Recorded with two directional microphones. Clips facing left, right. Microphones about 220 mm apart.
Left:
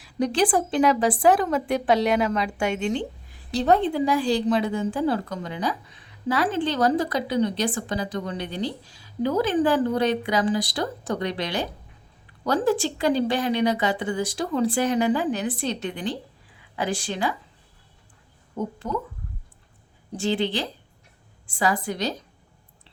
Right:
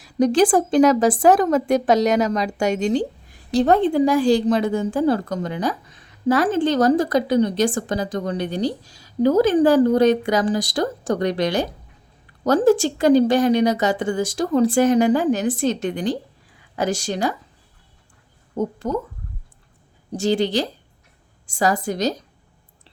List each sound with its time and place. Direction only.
0.0 s a woman's voice: 45° right (ahead or behind)
18.5 s speech: 40° right (ahead or behind)
20.1 s a woman's voice: 40° right (ahead or behind)